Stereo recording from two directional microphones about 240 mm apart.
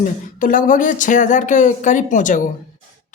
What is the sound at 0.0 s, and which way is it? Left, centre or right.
Speech, left.